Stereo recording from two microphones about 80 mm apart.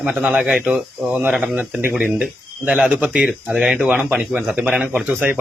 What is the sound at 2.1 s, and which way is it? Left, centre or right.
A man's voice, centre.